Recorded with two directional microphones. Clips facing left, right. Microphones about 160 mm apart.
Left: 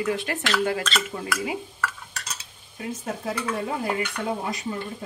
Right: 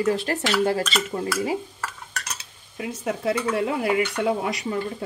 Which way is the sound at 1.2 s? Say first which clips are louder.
Right 4 dB; 40° right (ahead or behind).